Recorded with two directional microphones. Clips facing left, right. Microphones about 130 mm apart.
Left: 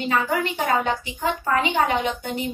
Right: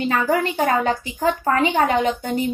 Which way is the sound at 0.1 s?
40° right (ahead or behind).